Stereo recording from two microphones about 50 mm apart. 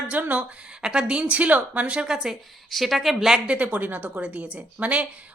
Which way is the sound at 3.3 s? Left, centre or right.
Right.